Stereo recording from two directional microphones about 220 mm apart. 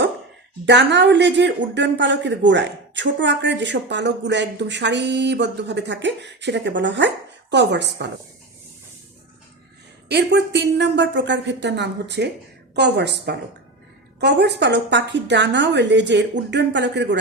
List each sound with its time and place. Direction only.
0.6 s speech: 55° right (ahead or behind)
10.1 s speech: 50° right (ahead or behind)